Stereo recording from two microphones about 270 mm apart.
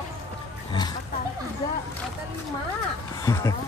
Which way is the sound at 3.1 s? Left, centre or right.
Centre.